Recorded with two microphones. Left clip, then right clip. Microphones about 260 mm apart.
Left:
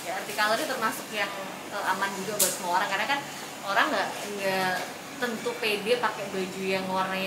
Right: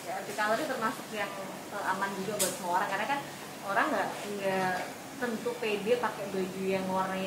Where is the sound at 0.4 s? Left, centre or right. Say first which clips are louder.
Left 4 dB; centre.